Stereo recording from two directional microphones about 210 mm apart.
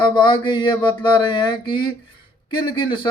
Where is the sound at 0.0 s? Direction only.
20° left (ahead or behind).